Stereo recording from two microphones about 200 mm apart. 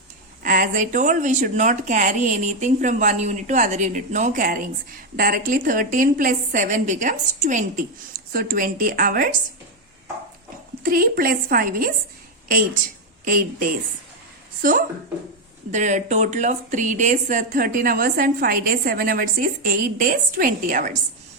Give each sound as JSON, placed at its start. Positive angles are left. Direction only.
{"t": 0.4, "sound": "a woman's voice", "side_deg": -45}
{"t": 10.8, "sound": "a woman's voice", "side_deg": -45}
{"t": 13.2, "sound": "a woman's voice", "side_deg": -45}